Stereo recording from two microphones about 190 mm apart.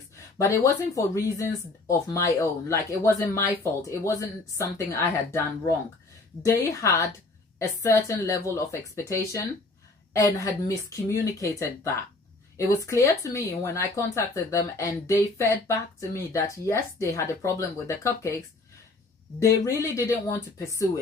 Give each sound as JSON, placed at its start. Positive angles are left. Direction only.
{"t": 0.3, "sound": "speech", "side_deg": 15}